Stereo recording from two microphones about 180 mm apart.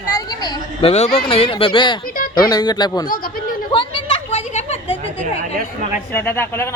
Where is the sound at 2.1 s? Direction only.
55° left (ahead or behind).